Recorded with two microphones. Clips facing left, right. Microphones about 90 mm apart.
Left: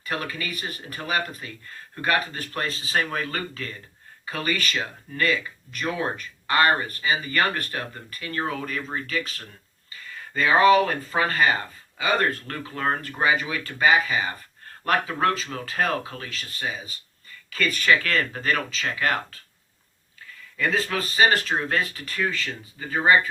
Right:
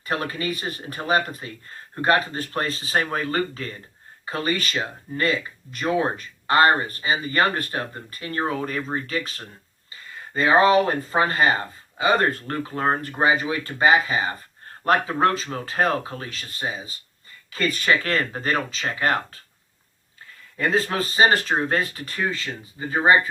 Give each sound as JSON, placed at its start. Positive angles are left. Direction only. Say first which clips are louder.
{"t": 0.0, "sound": "speech", "louder": "right 4 dB", "side_deg": -30}
{"t": 20.6, "sound": "speech", "louder": "right 3 dB", "side_deg": -35}